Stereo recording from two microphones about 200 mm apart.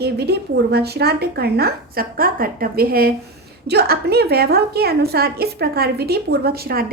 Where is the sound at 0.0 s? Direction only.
55° right (ahead or behind).